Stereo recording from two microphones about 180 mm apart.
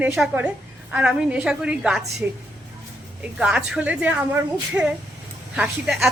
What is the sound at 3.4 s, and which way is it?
A woman's voice, 5° right (ahead or behind).